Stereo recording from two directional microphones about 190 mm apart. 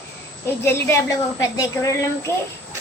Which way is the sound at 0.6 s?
15° left (ahead or behind).